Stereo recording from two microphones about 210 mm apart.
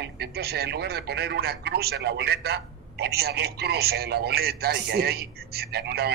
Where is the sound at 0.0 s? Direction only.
50° right (ahead or behind).